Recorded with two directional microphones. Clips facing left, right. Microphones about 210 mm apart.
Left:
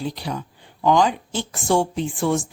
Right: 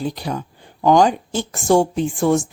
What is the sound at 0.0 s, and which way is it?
A woman's voice, 45° right (ahead or behind).